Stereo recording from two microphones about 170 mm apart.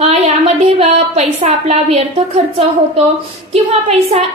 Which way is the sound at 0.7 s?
40° right (ahead or behind).